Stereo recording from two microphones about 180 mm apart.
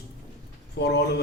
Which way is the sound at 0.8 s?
70° left (ahead or behind).